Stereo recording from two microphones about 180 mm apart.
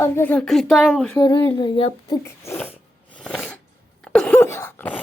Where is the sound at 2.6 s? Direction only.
5° left (ahead or behind).